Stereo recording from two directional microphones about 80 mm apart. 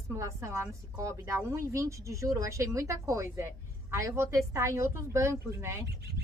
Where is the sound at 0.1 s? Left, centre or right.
Right.